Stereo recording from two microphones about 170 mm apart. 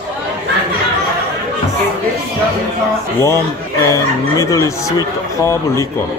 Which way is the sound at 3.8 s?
20° left (ahead or behind).